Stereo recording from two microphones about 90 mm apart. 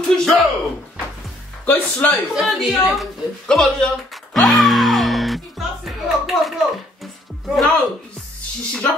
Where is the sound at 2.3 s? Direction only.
Centre (ahead or behind).